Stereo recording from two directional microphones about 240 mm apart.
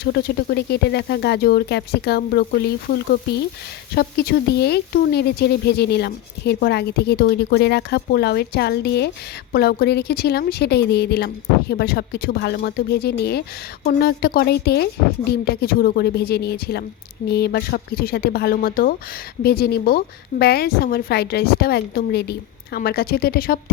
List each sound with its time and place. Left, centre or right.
0.0 s a woman's voice: left